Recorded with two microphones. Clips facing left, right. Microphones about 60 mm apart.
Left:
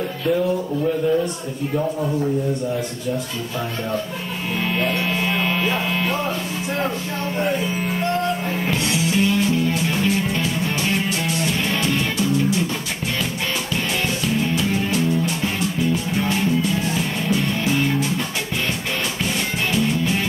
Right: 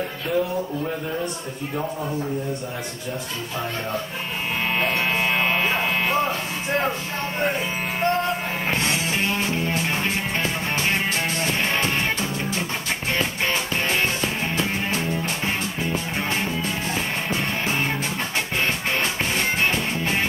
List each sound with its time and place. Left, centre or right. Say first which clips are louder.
4.7 s a sound: even; right
7.4 s music: left 1 dB; right
14.2 s music: left 3 dB; right
19.7 s music: left 4 dB; right